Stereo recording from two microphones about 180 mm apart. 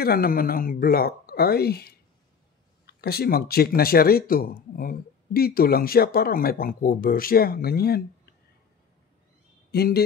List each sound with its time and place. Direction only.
0.0 s speech: 55° left (ahead or behind)
9.7 s speech: 60° left (ahead or behind)